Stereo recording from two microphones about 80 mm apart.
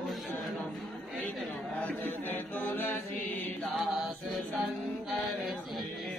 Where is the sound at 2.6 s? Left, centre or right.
Left.